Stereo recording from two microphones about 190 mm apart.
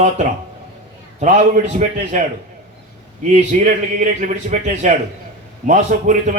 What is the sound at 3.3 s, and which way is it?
A man's voice, 40° right (ahead or behind).